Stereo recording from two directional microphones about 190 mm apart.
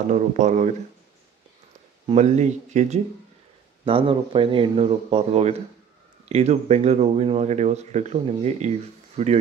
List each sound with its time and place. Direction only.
0.1 s speech: 40° right (ahead or behind)
2.0 s speech: 35° right (ahead or behind)
3.8 s speech: 25° right (ahead or behind)